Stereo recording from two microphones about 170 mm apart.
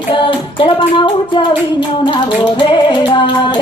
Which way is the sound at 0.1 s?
30° left (ahead or behind).